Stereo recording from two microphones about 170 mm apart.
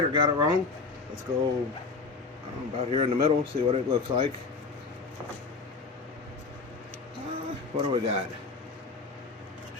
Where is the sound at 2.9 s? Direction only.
35° right (ahead or behind).